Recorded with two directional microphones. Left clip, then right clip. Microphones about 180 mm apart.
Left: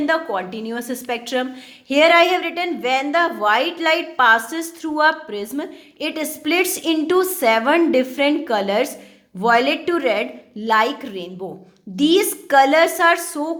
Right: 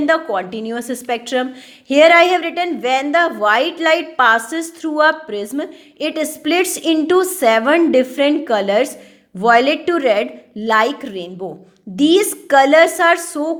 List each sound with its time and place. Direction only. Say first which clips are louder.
0.0 s a woman's voice: right 4 dB; 25° right (ahead or behind)